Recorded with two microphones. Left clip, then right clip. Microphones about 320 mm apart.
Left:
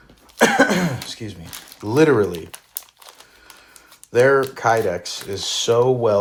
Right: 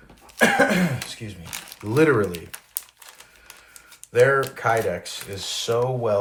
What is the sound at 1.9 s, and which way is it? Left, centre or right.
Speech, centre.